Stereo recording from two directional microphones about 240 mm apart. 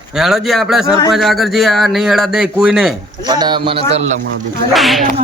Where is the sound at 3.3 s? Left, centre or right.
Centre.